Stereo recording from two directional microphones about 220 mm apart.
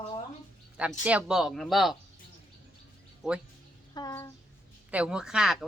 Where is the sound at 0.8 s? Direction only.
5° right (ahead or behind).